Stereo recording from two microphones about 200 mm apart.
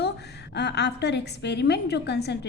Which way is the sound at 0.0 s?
55° left (ahead or behind).